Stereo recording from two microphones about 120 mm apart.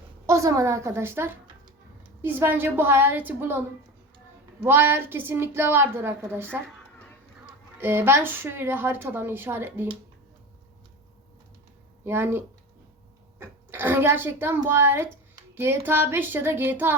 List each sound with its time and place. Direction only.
0.3 s a woman's voice: 25° right (ahead or behind)
4.6 s a woman's voice: 20° right (ahead or behind)
7.8 s a woman's voice: 20° right (ahead or behind)
12.0 s a woman's voice: 20° right (ahead or behind)
13.4 s a woman's voice: 20° right (ahead or behind)